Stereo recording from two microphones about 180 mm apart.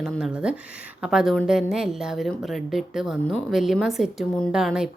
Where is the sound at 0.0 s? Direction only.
5° right (ahead or behind).